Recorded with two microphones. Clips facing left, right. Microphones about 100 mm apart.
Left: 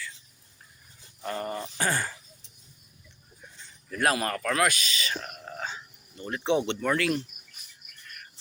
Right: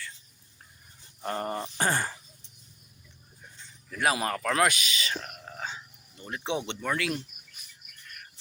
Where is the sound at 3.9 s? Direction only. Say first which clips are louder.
Left 1 dB; 5° right (ahead or behind).